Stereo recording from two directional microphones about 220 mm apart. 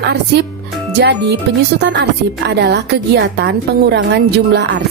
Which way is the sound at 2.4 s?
50° right (ahead or behind).